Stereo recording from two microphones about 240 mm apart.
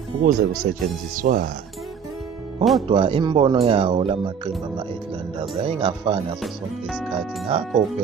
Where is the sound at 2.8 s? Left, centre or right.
Right.